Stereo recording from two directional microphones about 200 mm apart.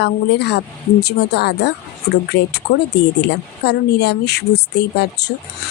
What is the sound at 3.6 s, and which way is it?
Speech, 55° left (ahead or behind).